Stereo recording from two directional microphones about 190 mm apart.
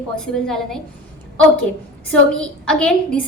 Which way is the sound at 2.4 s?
5° left (ahead or behind).